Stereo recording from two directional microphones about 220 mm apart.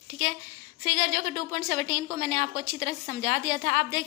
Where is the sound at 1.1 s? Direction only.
35° right (ahead or behind).